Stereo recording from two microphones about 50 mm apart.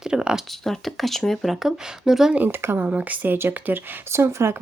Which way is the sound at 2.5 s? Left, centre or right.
Right.